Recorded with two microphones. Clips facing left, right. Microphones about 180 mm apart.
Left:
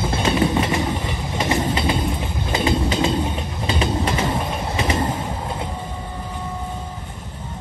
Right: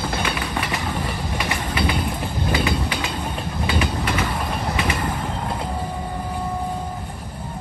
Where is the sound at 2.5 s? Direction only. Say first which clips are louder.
Left 3 dB; 25° left (ahead or behind).